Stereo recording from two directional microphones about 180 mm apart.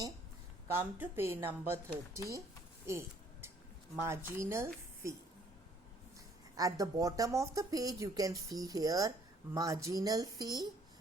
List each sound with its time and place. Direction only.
0.7 s speech: 15° right (ahead or behind)
6.6 s speech: 20° right (ahead or behind)